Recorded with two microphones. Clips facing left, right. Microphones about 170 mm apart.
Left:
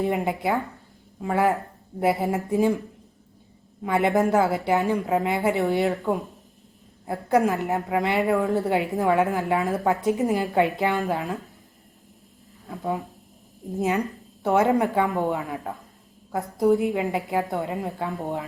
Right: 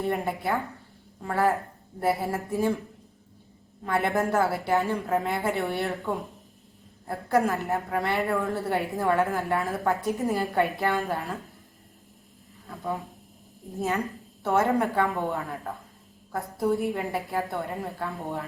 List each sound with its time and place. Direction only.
0.0 s a woman's voice: 15° left (ahead or behind)
3.8 s a woman's voice: 15° left (ahead or behind)
7.4 s a woman's voice: 15° left (ahead or behind)
13.7 s a woman's voice: 15° left (ahead or behind)
16.6 s a woman's voice: 20° left (ahead or behind)